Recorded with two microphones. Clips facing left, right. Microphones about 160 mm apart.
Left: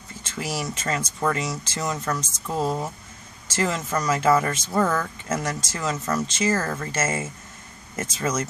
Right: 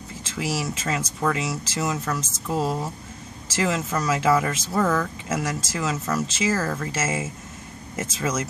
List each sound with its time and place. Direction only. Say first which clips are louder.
0.4 s speech: right 2 dB; 5° right (ahead or behind)